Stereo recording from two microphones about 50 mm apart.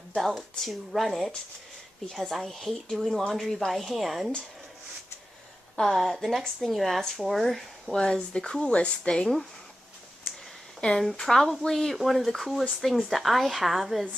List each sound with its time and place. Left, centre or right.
0.1 s a woman's voice: centre
2.0 s a woman's voice: centre
5.8 s a woman's voice: centre
7.9 s speech: centre
11.0 s a woman's voice: centre